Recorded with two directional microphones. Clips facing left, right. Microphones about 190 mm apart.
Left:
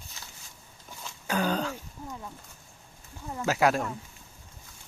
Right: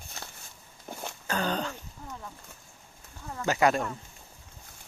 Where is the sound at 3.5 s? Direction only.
Centre (ahead or behind).